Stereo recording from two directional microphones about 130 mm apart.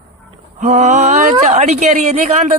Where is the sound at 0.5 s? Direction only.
65° right (ahead or behind).